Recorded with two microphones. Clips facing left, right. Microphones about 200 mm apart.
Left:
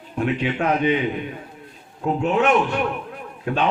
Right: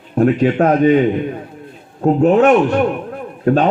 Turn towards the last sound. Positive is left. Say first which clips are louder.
# right 9 dB
turn(degrees=-40)  # may be behind; listen again after turning